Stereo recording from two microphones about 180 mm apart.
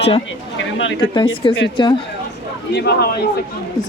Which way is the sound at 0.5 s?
90° left.